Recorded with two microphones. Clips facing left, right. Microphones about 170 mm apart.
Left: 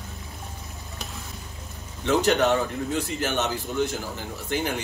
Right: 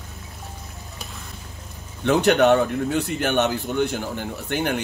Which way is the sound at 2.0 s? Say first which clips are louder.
Right 4 dB; 65° right (ahead or behind).